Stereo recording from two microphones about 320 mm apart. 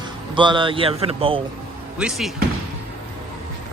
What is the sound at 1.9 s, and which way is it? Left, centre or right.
Speech, centre.